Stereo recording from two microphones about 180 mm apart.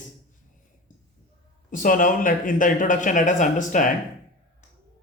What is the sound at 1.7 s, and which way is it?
Speech, 45° left (ahead or behind).